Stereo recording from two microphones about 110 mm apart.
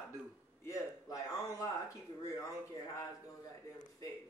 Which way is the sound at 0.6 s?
30° left (ahead or behind).